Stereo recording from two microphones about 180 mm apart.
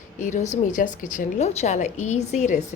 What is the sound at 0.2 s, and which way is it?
A woman's voice, 45° left (ahead or behind).